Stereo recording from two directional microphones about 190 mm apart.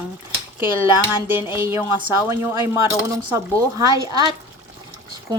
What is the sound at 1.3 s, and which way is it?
A woman's voice, 10° right (ahead or behind).